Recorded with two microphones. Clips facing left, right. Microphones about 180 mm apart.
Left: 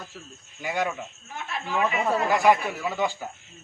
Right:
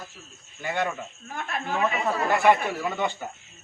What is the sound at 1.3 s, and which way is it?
Speech, 50° right (ahead or behind).